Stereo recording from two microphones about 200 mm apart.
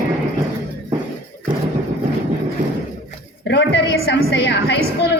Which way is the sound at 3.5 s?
60° left (ahead or behind).